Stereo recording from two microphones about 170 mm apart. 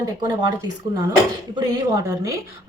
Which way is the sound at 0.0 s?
25° right (ahead or behind).